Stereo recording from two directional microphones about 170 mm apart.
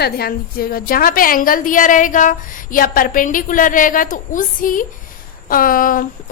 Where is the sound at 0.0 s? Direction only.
65° left (ahead or behind).